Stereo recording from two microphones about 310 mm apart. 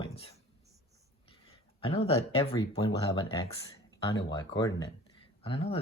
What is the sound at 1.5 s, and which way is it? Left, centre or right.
Speech, centre.